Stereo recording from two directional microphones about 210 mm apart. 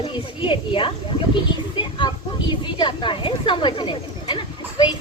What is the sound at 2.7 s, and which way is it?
A woman's voice, 20° left (ahead or behind).